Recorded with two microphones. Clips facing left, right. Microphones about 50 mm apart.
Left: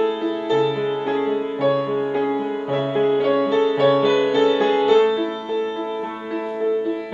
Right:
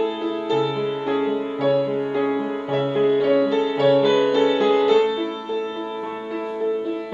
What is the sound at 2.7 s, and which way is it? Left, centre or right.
Music, centre.